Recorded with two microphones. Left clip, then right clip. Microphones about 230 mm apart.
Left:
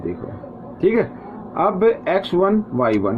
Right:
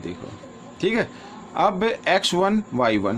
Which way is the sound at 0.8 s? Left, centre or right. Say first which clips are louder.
Left 5 dB; right.